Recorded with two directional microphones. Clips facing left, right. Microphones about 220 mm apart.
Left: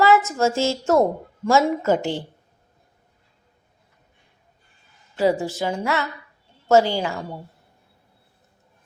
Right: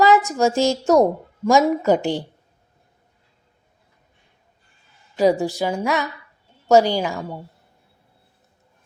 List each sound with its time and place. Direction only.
0.0 s a woman's voice: 15° right (ahead or behind)
5.1 s a woman's voice: 15° right (ahead or behind)